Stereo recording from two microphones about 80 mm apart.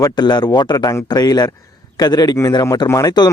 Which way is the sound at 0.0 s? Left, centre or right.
Left.